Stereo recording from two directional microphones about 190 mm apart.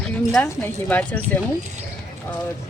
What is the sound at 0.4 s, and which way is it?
Speech, 10° left (ahead or behind).